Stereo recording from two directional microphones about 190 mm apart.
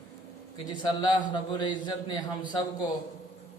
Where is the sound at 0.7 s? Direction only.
20° left (ahead or behind).